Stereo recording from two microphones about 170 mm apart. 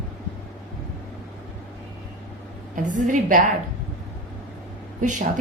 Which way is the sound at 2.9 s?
50° right (ahead or behind).